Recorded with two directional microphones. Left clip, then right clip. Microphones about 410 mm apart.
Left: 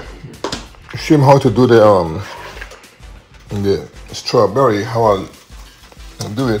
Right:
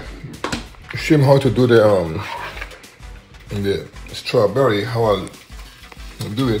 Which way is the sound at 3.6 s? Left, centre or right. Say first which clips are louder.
Left 5 dB; left.